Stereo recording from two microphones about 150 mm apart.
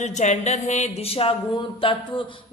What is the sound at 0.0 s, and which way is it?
A man's voice, 50° left (ahead or behind).